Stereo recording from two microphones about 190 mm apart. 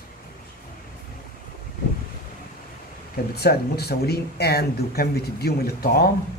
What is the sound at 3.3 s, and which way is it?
A man's voice, 55° left (ahead or behind).